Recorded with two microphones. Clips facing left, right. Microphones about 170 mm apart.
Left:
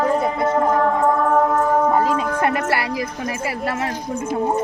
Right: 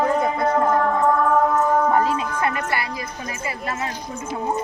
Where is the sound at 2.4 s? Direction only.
65° left (ahead or behind).